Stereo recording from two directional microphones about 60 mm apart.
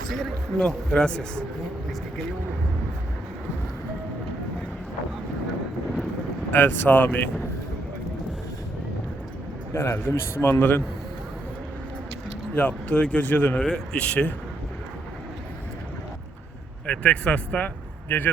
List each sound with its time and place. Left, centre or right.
0.1 s speech: centre
6.5 s a man's voice: left
9.7 s a man's voice: left
12.5 s speech: left
16.8 s a man's voice: left